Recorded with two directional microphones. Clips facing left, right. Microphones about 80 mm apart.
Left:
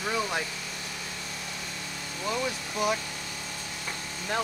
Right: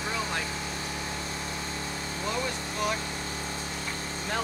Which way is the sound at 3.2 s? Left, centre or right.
Right.